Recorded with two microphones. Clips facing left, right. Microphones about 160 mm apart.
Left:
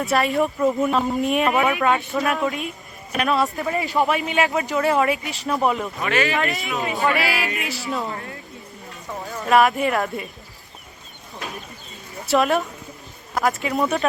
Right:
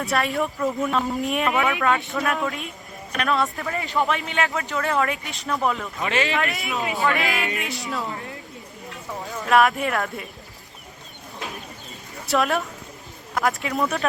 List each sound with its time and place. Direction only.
0.0 s speech: centre (ahead or behind)
0.6 s speech: 15° left (ahead or behind)
0.9 s speech: centre (ahead or behind)
1.5 s speech: 20° left (ahead or behind)
2.2 s speech: 5° left (ahead or behind)
5.5 s speech: 15° left (ahead or behind)
6.0 s speech: 25° right (ahead or behind)
6.3 s speech: centre (ahead or behind)
7.9 s speech: 20° left (ahead or behind)
9.4 s speech: centre (ahead or behind)
12.3 s speech: centre (ahead or behind)